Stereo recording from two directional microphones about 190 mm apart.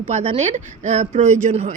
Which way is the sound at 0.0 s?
35° right (ahead or behind).